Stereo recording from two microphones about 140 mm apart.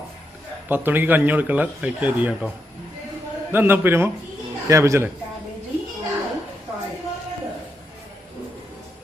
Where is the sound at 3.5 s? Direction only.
15° right (ahead or behind).